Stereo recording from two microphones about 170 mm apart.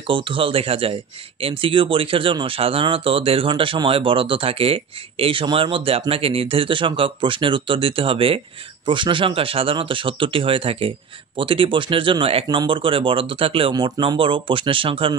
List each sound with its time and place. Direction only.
0.0 s speech: 30° right (ahead or behind)